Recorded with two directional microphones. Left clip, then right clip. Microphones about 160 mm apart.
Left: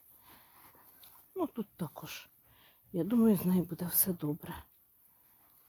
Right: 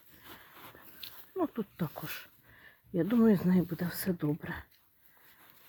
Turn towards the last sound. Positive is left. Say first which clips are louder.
# right 4 dB
turn(degrees=0)  # may be behind; listen again after turning